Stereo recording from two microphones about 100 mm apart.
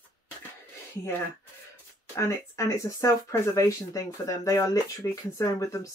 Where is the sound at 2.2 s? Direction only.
30° left (ahead or behind).